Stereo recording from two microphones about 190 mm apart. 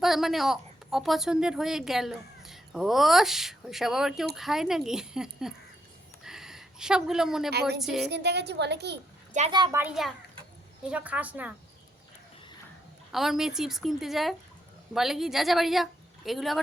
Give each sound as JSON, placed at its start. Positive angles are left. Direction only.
{"t": 0.0, "sound": "a woman's voice", "side_deg": 0}
{"t": 6.2, "sound": "a sound", "side_deg": 0}
{"t": 7.8, "sound": "speech", "side_deg": 0}
{"t": 8.0, "sound": "a woman's voice", "side_deg": -60}
{"t": 9.5, "sound": "a child's voice", "side_deg": -25}
{"t": 9.7, "sound": "a woman's voice", "side_deg": -5}
{"t": 13.1, "sound": "speech", "side_deg": 0}